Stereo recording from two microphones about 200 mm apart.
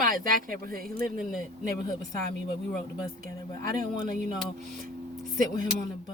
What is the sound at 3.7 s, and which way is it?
Music, 40° right (ahead or behind).